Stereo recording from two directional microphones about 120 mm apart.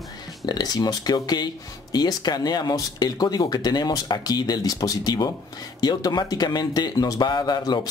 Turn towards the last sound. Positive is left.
turn(degrees=35)  # may be behind; listen again after turning